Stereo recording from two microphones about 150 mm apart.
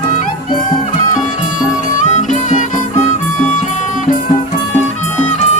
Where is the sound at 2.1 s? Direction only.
55° left (ahead or behind).